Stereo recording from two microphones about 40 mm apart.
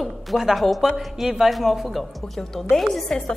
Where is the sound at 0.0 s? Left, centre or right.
Centre.